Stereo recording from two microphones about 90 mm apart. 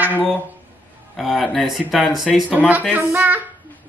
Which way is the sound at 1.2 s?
Centre (ahead or behind).